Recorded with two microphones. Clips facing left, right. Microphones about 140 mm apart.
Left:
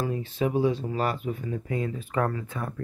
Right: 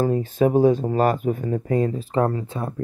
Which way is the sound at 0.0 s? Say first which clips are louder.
Right 8 dB; 45° right (ahead or behind).